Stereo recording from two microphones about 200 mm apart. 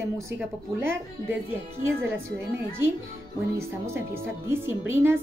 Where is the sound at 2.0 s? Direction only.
10° right (ahead or behind).